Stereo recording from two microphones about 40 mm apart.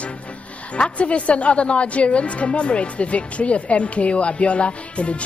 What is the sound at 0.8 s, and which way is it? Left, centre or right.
A woman's voice, left.